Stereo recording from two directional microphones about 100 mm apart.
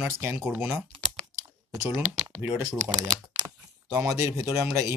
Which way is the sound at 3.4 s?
30° right (ahead or behind).